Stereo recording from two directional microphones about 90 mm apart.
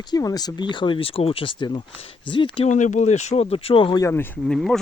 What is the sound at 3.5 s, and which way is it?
Speech, 90° left.